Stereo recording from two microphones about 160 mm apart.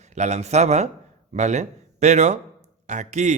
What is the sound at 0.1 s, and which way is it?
Speech, 45° right (ahead or behind).